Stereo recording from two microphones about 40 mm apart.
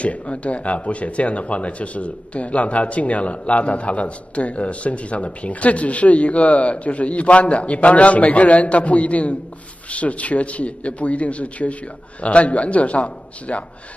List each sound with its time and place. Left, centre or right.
0.0 s speech: left